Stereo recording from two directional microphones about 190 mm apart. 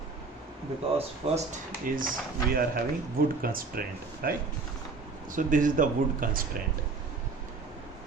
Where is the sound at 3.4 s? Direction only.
50° right (ahead or behind).